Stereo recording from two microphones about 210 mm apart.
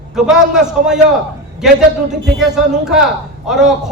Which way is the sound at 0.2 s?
Centre (ahead or behind).